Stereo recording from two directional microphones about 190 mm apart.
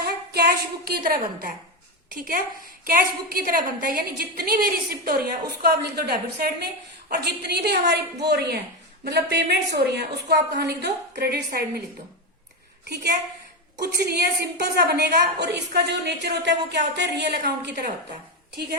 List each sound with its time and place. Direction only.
0.0 s a woman's voice: 55° right (ahead or behind)
13.8 s a woman's voice: 55° right (ahead or behind)